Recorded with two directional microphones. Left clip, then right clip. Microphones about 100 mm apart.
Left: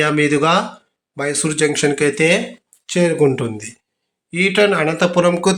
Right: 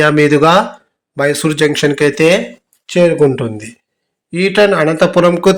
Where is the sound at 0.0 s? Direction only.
40° right (ahead or behind).